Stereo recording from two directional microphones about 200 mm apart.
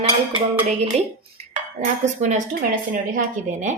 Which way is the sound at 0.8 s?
30° right (ahead or behind).